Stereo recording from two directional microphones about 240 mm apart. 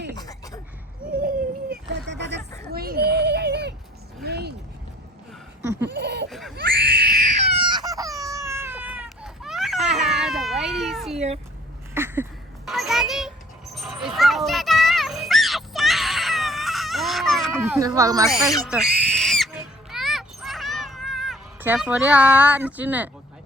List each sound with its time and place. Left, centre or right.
0.2 s a sound: centre
1.7 s a sound: right
5.9 s laughter: right
6.6 s baby cry: right; by 9.7 s centre
9.7 s cat: right
10.0 s cat: centre
11.9 s a sound: centre
13.7 s music: centre
17.8 s owl: centre
18.3 s speech: centre
18.7 s pig: centre
19.9 s a sound: centre